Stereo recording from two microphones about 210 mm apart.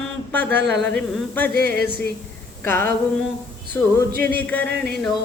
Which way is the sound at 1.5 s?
45° right (ahead or behind).